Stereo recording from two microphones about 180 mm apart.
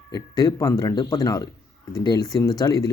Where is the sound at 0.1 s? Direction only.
20° left (ahead or behind).